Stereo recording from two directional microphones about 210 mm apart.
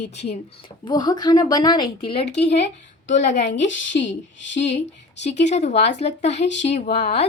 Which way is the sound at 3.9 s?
50° left (ahead or behind).